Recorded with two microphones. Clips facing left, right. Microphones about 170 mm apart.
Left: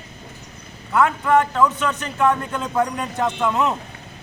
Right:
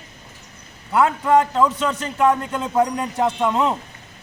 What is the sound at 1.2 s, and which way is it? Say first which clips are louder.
A man's voice: right 1 dB; 25° right (ahead or behind).